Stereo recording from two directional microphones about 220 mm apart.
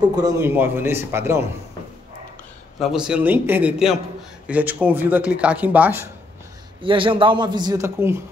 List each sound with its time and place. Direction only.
0.0 s speech: 15° right (ahead or behind)
2.8 s a man's voice: centre (ahead or behind)
6.8 s a man's voice: 25° right (ahead or behind)